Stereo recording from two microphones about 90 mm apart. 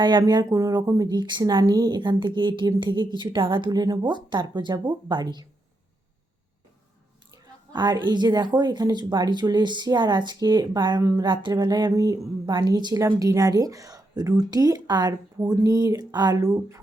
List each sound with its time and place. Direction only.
0.0 s speech: 55° right (ahead or behind)
0.5 s speech: 35° right (ahead or behind)
1.0 s speech: 55° right (ahead or behind)
7.7 s a woman's voice: 55° right (ahead or behind)
12.5 s speech: 55° right (ahead or behind); by 16.8 s 35° right (ahead or behind)